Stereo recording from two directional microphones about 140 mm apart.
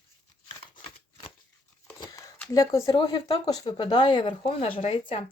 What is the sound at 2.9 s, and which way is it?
Speech, 35° left (ahead or behind).